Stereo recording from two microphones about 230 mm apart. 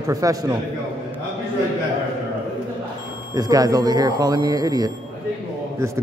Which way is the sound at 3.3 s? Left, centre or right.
Centre.